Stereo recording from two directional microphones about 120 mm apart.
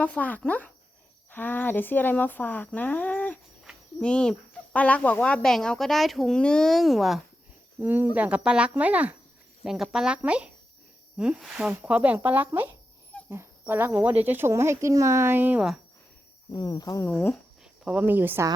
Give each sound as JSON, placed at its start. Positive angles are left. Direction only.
{"t": 0.0, "sound": "speech", "side_deg": 10}
{"t": 3.7, "sound": "cricket", "side_deg": -5}
{"t": 4.0, "sound": "speech", "side_deg": 10}
{"t": 7.8, "sound": "speech", "side_deg": -15}
{"t": 16.5, "sound": "speech", "side_deg": 35}
{"t": 17.1, "sound": "speech", "side_deg": 15}
{"t": 17.6, "sound": "speech", "side_deg": -10}